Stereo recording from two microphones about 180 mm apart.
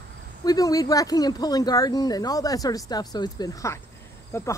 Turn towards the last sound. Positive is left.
turn(degrees=15)  # may be behind; listen again after turning